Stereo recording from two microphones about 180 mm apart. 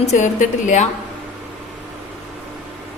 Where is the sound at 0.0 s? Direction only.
40° left (ahead or behind).